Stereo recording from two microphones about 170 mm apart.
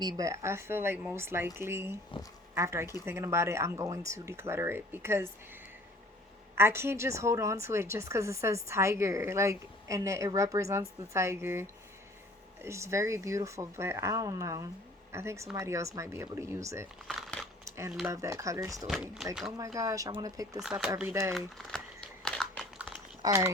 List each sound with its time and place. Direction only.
0.2 s a woman's voice: 15° right (ahead or behind)
6.6 s a woman's voice: 15° right (ahead or behind)
17.1 s crumpling: 5° left (ahead or behind)
18.1 s speech: 20° right (ahead or behind)
18.9 s speech: centre (ahead or behind)
19.5 s speech: 20° right (ahead or behind)
20.6 s speech: 5° right (ahead or behind)
21.0 s a woman's voice: 15° right (ahead or behind)
21.3 s speech: centre (ahead or behind)
22.2 s crumpling: centre (ahead or behind)
23.2 s speech: 15° right (ahead or behind)